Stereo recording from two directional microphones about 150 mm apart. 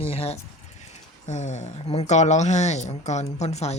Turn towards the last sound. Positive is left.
turn(degrees=45)  # may be behind; listen again after turning